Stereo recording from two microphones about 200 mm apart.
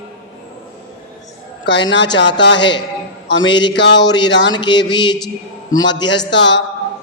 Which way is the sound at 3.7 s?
60° left (ahead or behind).